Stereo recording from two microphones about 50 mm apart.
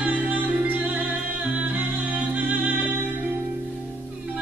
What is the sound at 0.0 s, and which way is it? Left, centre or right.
Music, right.